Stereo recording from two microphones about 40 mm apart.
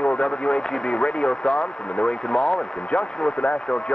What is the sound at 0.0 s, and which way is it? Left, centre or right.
Speech, left.